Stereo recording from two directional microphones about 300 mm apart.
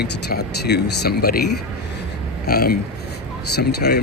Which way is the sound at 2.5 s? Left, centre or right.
Left.